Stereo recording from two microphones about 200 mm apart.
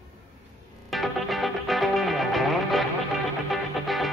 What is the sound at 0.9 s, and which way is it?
Music, centre (ahead or behind).